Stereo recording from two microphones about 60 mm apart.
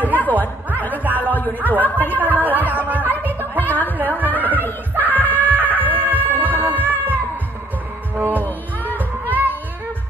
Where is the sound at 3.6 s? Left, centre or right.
Left.